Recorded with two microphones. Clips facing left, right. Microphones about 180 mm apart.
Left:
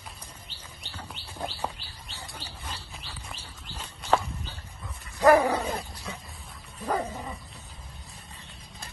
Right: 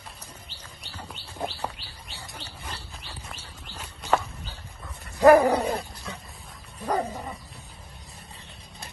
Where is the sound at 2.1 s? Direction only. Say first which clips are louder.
Even; 15° right (ahead or behind).